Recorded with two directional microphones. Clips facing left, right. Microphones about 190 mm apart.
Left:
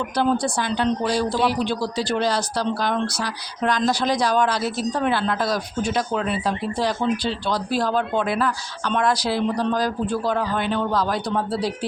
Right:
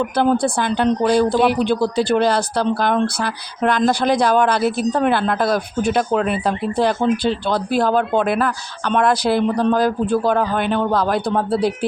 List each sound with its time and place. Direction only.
0.2 s speech: 55° right (ahead or behind)